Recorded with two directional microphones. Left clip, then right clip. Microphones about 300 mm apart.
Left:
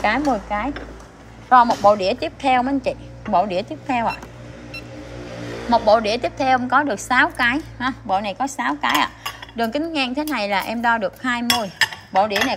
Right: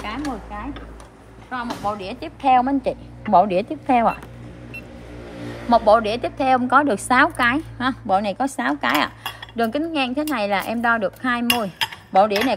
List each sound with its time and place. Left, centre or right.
0.0 s speech: left
1.5 s a woman's voice: centre
5.7 s a woman's voice: centre